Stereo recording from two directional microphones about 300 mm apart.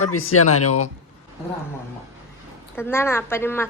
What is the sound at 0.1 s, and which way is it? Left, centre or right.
Speech, left.